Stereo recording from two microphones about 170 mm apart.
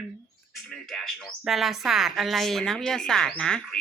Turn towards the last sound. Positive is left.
turn(degrees=5)  # may be behind; listen again after turning